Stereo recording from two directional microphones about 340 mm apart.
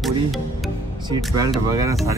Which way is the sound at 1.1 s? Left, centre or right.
Centre.